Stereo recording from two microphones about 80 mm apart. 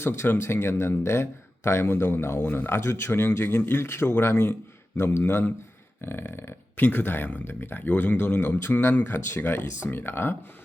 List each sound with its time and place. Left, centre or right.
0.0 s speech: left